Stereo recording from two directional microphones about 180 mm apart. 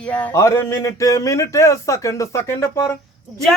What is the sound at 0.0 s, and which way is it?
Speech, 10° left (ahead or behind).